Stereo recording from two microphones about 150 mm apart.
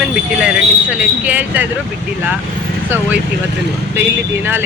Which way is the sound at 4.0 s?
15° right (ahead or behind).